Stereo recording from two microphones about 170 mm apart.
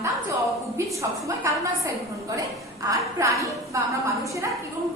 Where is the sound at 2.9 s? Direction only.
20° right (ahead or behind).